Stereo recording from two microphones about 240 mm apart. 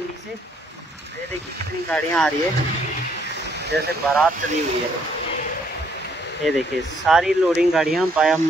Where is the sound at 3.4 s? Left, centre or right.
Right.